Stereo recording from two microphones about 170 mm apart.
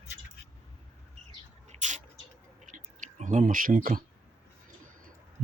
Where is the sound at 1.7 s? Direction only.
45° right (ahead or behind).